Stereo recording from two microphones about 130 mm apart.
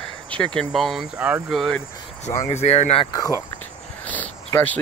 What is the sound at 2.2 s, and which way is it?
Speech, 60° left (ahead or behind).